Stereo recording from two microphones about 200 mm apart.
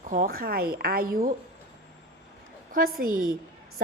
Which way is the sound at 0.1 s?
45° right (ahead or behind).